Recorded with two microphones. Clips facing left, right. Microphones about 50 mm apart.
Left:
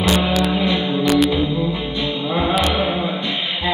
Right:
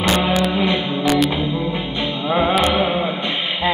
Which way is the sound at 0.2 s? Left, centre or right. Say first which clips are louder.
Right 1 dB; right.